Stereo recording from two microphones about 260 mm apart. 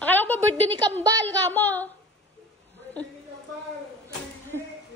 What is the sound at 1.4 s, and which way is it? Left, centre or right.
Speech, centre.